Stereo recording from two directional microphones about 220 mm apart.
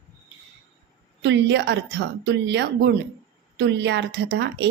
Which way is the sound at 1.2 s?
55° right (ahead or behind).